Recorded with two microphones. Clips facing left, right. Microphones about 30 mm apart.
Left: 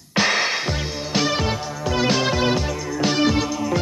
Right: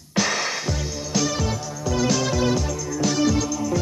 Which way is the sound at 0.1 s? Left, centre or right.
Left.